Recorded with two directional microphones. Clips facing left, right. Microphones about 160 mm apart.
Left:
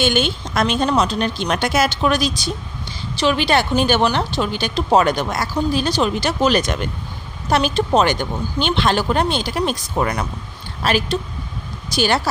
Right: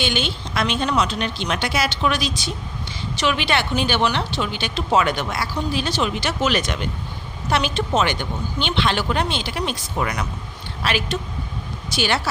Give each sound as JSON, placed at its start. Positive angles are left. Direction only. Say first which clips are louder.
{"t": 0.0, "sound": "a woman's voice", "louder": "left 5 dB", "side_deg": 50}